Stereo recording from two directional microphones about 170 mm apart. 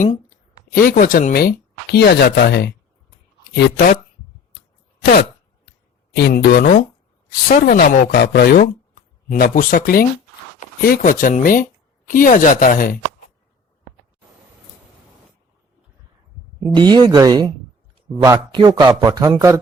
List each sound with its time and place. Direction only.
0.3 s a woman's voice: 55° left (ahead or behind); by 2.7 s 75° left (ahead or behind)
3.4 s speech: 90° left
6.1 s speech: 70° left (ahead or behind); by 13.0 s 55° left (ahead or behind)
16.7 s a man's voice: 25° right (ahead or behind)